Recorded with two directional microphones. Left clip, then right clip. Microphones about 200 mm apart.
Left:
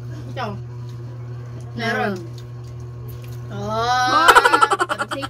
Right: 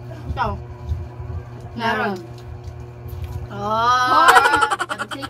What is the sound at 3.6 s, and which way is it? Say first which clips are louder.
Mantra: right 3 dB; 20° left (ahead or behind).